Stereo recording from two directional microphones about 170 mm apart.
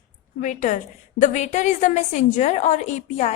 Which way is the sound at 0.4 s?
45° left (ahead or behind).